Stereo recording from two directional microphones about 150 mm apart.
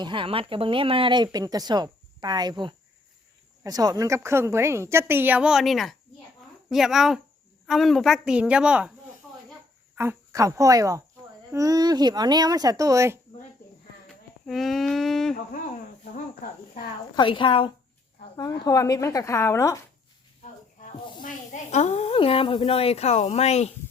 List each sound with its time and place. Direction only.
0.0 s a woman's voice: 35° right (ahead or behind); by 8.9 s 5° right (ahead or behind)
9.9 s speech: 15° right (ahead or behind)
14.4 s a woman's voice: centre (ahead or behind)
17.2 s speech: 35° left (ahead or behind)
18.6 s a woman's voice: 25° left (ahead or behind)
21.2 s a woman's voice: 50° left (ahead or behind)
22.1 s speech: 40° left (ahead or behind)